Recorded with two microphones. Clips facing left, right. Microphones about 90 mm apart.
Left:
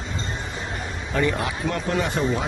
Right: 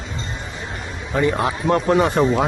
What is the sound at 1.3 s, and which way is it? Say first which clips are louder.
Speech: right 6 dB; 35° right (ahead or behind).